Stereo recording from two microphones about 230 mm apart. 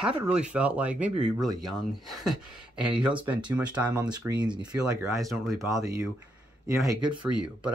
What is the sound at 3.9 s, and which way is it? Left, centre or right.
Speech, centre.